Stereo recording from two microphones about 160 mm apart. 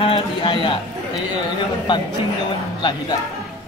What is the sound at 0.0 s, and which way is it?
Speech, 35° left (ahead or behind).